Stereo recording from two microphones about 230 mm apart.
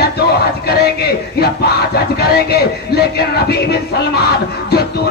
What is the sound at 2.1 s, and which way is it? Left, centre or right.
Music, left.